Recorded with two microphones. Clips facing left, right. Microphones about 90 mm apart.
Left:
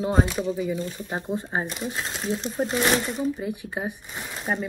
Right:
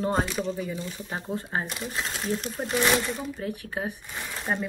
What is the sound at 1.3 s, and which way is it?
Speech, 20° left (ahead or behind).